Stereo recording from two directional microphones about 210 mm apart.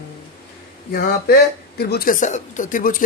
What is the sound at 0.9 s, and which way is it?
Speech, 45° left (ahead or behind).